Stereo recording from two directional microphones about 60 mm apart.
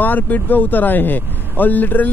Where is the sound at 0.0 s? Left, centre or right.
Left.